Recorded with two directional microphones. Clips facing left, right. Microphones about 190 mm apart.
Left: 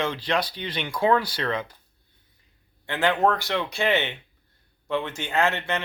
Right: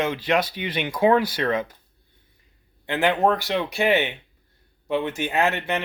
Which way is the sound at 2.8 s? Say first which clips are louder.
Right 2 dB; 15° right (ahead or behind).